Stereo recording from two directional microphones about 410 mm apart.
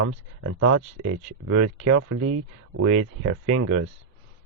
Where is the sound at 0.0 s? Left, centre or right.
Right.